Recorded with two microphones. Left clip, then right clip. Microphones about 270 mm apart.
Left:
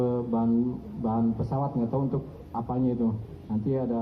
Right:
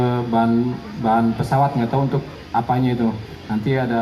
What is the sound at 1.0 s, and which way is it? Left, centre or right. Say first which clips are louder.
Speech: right 11 dB; right.